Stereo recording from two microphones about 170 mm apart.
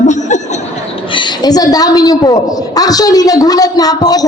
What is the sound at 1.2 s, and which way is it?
A woman's voice, 25° left (ahead or behind).